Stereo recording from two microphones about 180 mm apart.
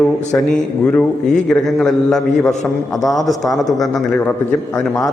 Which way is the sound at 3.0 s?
20° left (ahead or behind).